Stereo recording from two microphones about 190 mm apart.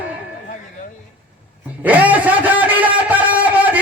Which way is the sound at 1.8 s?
10° right (ahead or behind).